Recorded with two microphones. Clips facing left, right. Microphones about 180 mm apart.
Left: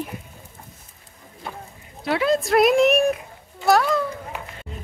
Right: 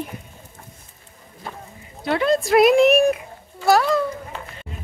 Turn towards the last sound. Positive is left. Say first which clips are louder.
# right 1 dB
turn(degrees=0)  # may be behind; listen again after turning